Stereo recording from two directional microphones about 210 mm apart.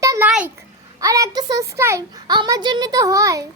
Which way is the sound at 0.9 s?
15° right (ahead or behind).